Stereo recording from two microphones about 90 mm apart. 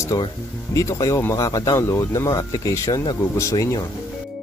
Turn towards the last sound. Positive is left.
turn(degrees=40)  # may be behind; listen again after turning